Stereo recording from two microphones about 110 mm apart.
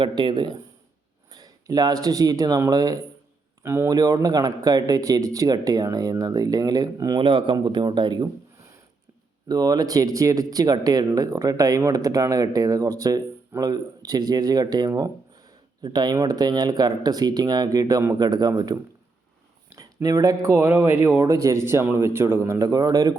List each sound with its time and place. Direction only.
0.0 s speech: 45° right (ahead or behind)
1.3 s speech: 35° right (ahead or behind)
3.6 s speech: 20° right (ahead or behind)
3.8 s speech: 35° right (ahead or behind)
7.2 s speech: 50° right (ahead or behind)
8.5 s a sound: 25° right (ahead or behind)
9.5 s speech: 35° right (ahead or behind)
20.7 s speech: 15° right (ahead or behind)
21.2 s a man's voice: 30° right (ahead or behind)